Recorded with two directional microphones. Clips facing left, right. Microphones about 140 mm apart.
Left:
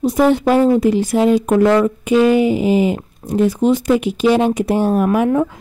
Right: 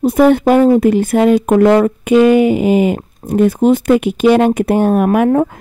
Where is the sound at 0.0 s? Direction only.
55° right (ahead or behind).